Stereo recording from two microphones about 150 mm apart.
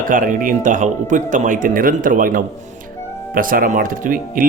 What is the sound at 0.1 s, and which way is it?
Speech, 60° right (ahead or behind).